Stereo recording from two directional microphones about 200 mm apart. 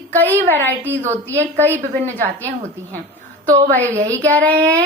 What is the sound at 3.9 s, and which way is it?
Speech, 15° right (ahead or behind).